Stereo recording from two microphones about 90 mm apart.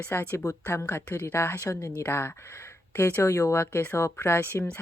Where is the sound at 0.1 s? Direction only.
25° left (ahead or behind).